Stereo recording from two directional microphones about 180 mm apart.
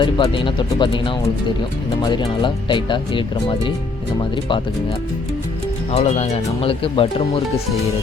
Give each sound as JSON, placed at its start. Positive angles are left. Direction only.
{"t": 0.0, "sound": "speech", "side_deg": 25}
{"t": 5.9, "sound": "speech", "side_deg": 40}